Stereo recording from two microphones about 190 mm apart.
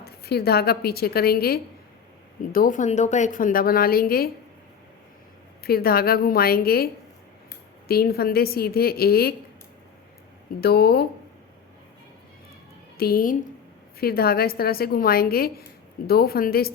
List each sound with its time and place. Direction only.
0.0 s a woman's voice: 55° left (ahead or behind)
5.6 s a woman's voice: 55° left (ahead or behind)
10.6 s speech: 55° left (ahead or behind)
13.0 s a woman's voice: 50° left (ahead or behind)